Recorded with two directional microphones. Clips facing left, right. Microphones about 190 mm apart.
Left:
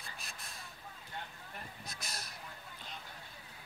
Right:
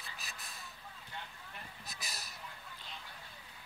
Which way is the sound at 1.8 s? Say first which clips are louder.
Left 2 dB; centre (ahead or behind).